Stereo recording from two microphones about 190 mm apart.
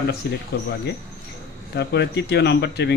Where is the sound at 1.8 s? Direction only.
65° left (ahead or behind).